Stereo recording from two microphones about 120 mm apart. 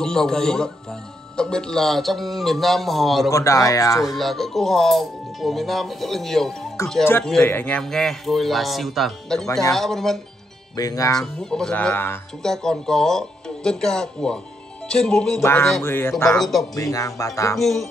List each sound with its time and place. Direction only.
0.0 s speech: 5° left (ahead or behind)
3.3 s music: 25° left (ahead or behind)
4.0 s speech: centre (ahead or behind)
7.4 s speech: 15° left (ahead or behind)
10.8 s speech: 30° left (ahead or behind)
11.1 s speech: 5° left (ahead or behind)
12.4 s speech: 5° left (ahead or behind)
15.4 s music: 20° left (ahead or behind)
16.3 s speech: centre (ahead or behind)
16.7 s music: 30° left (ahead or behind)
17.6 s speech: centre (ahead or behind)